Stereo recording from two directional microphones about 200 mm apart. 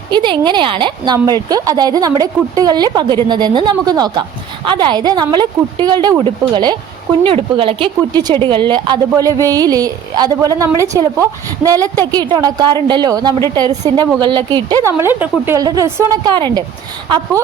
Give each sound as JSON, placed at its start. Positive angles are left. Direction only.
{"t": 0.1, "sound": "speech", "side_deg": -20}